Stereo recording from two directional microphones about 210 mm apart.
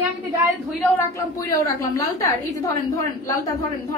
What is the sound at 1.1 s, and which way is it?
A woman's voice, 15° left (ahead or behind).